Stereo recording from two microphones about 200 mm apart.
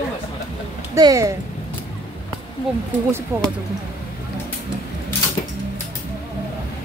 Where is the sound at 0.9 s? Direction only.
15° right (ahead or behind).